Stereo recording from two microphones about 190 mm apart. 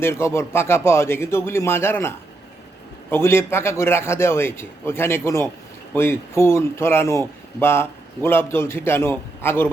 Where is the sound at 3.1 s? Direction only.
15° left (ahead or behind).